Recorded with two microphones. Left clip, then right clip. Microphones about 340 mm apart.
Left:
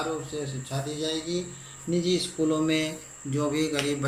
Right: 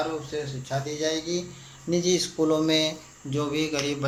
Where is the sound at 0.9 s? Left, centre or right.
Right.